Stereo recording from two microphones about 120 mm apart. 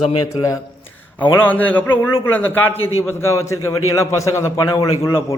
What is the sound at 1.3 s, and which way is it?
A man's voice, 15° left (ahead or behind).